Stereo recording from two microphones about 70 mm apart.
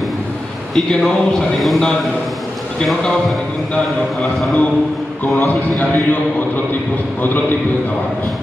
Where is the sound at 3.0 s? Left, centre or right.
Centre.